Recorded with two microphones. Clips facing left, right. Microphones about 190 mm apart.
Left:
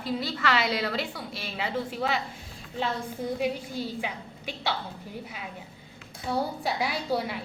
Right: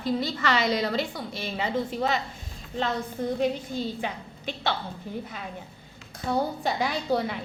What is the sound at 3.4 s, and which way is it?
A woman's voice, 10° left (ahead or behind).